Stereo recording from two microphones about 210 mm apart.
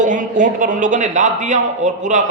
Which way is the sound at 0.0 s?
40° right (ahead or behind).